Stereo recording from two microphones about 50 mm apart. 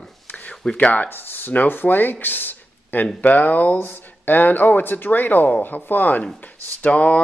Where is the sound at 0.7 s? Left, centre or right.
Left.